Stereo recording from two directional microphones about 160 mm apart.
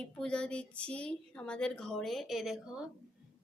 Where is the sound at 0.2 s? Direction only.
5° left (ahead or behind).